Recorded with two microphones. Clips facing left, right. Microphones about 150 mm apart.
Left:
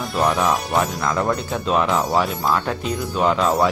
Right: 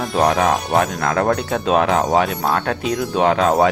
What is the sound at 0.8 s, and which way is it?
Speech, 55° right (ahead or behind).